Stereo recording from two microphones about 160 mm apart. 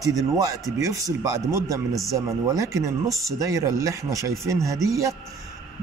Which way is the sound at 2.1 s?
20° right (ahead or behind).